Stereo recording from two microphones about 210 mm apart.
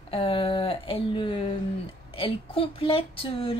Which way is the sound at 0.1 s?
25° left (ahead or behind).